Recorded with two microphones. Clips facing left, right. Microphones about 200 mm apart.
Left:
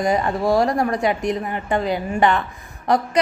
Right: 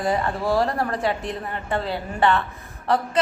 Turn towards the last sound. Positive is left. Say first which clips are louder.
# left 3 dB
turn(degrees=15)  # may be behind; listen again after turning